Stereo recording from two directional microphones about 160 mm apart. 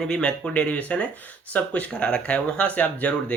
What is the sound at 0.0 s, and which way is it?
Speech, 5° left (ahead or behind).